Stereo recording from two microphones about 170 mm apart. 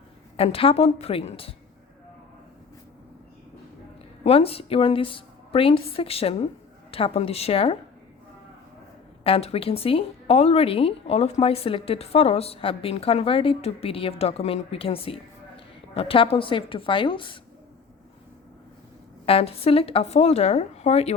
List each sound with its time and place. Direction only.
0.3 s speech: 35° left (ahead or behind)
4.2 s speech: 35° left (ahead or behind)
9.2 s speech: 35° left (ahead or behind)
19.2 s speech: 35° left (ahead or behind)